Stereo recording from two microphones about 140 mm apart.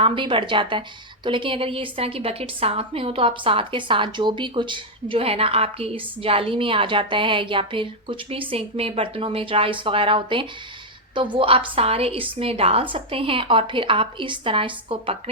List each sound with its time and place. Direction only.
0.0 s a woman's voice: 35° right (ahead or behind)